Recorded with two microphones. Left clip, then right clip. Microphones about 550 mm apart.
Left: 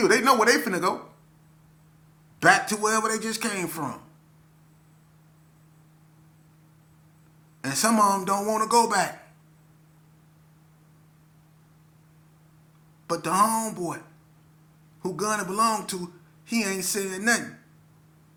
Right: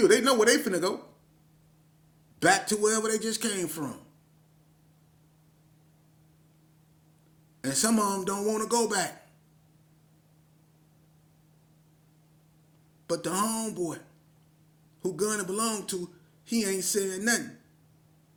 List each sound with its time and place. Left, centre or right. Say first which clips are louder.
0.0 s speech: left 2 dB; right
2.4 s speech: left 4 dB; right
7.6 s speech: left 6 dB; right
13.1 s speech: left 7 dB; right
15.0 s speech: left 3 dB; right